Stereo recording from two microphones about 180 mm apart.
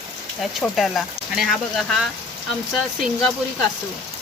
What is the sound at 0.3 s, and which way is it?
Speech, centre (ahead or behind).